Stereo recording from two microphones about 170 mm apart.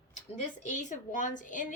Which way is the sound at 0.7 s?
45° left (ahead or behind).